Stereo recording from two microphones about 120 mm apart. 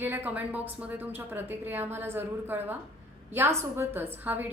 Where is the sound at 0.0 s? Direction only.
15° right (ahead or behind).